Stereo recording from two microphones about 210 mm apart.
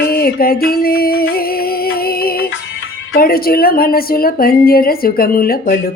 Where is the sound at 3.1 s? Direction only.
45° left (ahead or behind).